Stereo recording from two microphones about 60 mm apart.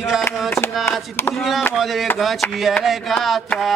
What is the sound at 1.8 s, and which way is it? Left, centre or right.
Chopping, centre.